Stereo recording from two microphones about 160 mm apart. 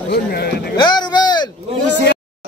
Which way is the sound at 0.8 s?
30° left (ahead or behind).